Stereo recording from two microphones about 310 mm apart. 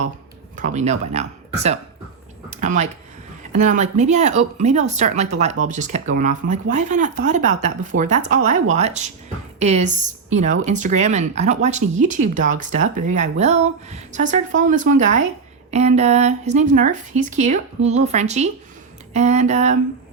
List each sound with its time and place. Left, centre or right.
0.5 s speech: right